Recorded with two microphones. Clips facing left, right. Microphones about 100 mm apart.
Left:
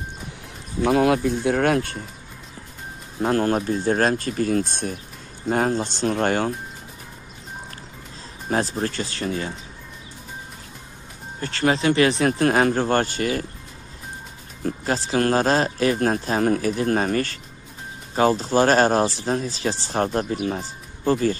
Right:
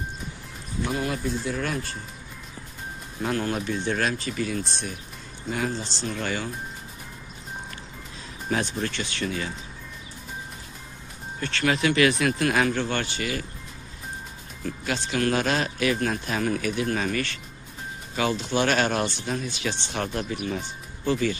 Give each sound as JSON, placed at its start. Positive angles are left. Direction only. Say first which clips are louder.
{"t": 0.8, "sound": "speech", "louder": "left 10 dB", "side_deg": 70}
{"t": 3.2, "sound": "speech", "louder": "left 7 dB", "side_deg": 40}
{"t": 8.5, "sound": "speech", "louder": "left 4 dB", "side_deg": 35}
{"t": 11.3, "sound": "speech", "louder": "left 4 dB", "side_deg": 30}
{"t": 14.6, "sound": "speech", "louder": "left 5 dB", "side_deg": 40}